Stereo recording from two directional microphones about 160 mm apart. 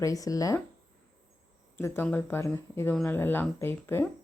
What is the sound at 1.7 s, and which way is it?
Speech, 15° left (ahead or behind).